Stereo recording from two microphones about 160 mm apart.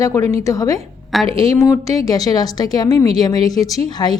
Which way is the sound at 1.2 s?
35° right (ahead or behind).